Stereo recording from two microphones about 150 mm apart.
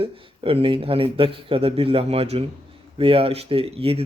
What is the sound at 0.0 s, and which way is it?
Speech, 35° right (ahead or behind).